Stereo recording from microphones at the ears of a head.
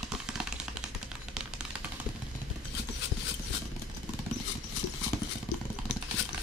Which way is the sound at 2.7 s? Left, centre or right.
Left.